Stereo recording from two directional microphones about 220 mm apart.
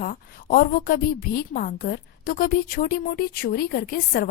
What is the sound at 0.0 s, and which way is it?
A woman's voice, 40° left (ahead or behind).